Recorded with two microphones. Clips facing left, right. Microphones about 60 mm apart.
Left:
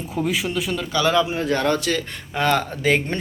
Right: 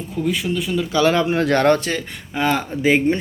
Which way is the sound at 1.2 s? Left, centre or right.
Right.